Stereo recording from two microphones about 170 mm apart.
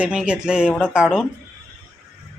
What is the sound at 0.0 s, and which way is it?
A man's voice, 5° right (ahead or behind).